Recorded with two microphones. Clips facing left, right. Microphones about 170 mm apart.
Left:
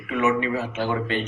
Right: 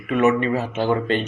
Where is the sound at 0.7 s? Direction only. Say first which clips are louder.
Right 5 dB; 25° right (ahead or behind).